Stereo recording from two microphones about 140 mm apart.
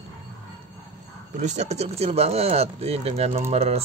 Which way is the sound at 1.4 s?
55° right (ahead or behind).